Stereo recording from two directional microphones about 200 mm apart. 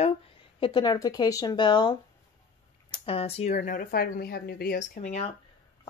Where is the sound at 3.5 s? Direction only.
45° left (ahead or behind).